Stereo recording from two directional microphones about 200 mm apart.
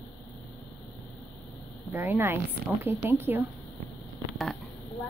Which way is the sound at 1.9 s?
10° right (ahead or behind).